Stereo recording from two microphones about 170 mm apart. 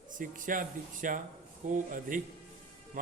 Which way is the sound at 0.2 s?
50° right (ahead or behind).